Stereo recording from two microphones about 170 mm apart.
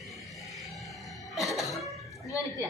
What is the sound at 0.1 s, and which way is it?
Cough, centre (ahead or behind).